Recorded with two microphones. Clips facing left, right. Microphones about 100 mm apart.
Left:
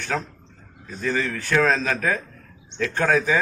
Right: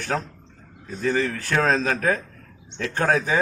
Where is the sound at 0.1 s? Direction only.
30° right (ahead or behind).